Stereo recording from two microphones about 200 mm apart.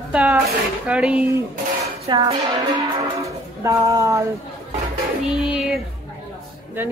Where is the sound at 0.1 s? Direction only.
5° right (ahead or behind).